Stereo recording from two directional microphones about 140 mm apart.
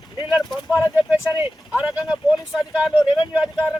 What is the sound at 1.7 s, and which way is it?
Speech, 5° right (ahead or behind).